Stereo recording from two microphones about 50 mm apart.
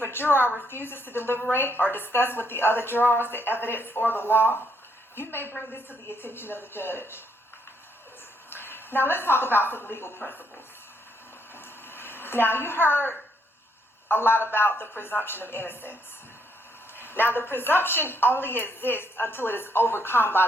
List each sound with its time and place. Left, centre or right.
0.0 s a woman's voice: left
8.4 s a sound: left
9.6 s a woman's voice: left
11.5 s a sound: left
14.1 s a woman's voice: left
17.0 s a woman's voice: left